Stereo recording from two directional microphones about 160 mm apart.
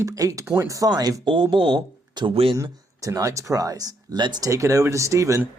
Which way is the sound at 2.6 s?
20° right (ahead or behind).